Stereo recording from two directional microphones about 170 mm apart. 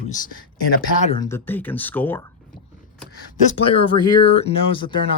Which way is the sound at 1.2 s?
15° left (ahead or behind).